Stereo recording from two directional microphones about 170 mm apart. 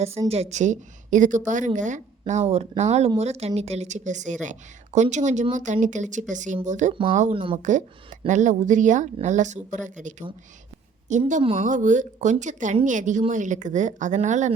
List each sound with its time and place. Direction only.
0.3 s a woman's voice: 40° right (ahead or behind)
7.3 s speech: 30° right (ahead or behind)
7.6 s a woman's voice: 45° right (ahead or behind)